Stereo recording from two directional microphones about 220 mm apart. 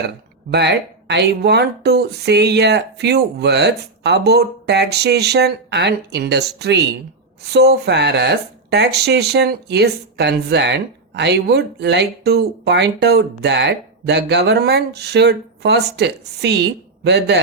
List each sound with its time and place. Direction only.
0.5 s speech: 50° right (ahead or behind)